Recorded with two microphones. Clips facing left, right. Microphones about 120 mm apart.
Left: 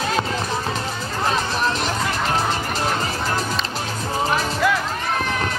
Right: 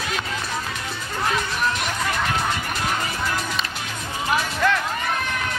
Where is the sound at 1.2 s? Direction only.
30° left (ahead or behind).